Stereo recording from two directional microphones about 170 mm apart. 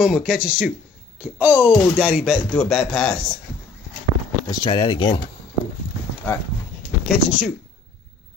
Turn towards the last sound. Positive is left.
turn(degrees=-5)  # may be behind; listen again after turning